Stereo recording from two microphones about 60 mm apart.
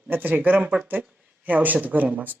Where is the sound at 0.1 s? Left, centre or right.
Right.